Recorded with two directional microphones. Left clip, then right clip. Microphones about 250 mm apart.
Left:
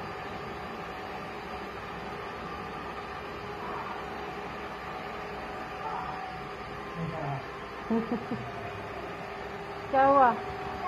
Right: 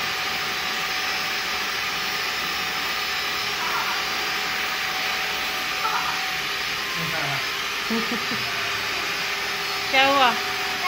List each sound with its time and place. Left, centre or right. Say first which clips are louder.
9.9 s speech: right 3 dB; right